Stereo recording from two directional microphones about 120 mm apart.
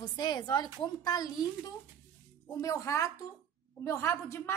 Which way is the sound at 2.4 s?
25° left (ahead or behind).